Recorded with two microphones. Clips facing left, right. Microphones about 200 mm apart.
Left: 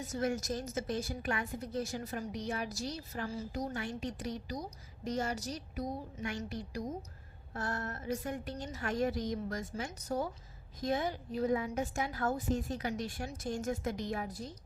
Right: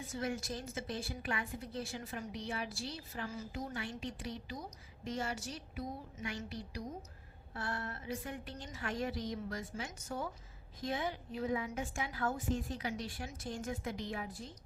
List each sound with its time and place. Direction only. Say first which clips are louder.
0.1 s a woman's voice: left 5 dB; 45° left (ahead or behind)